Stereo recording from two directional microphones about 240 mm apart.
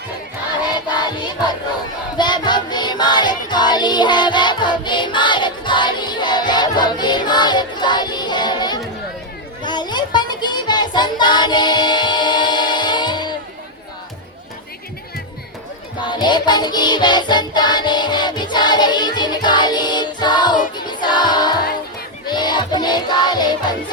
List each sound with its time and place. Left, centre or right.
0.9 s music: centre
9.6 s child singing: centre
16.0 s music: centre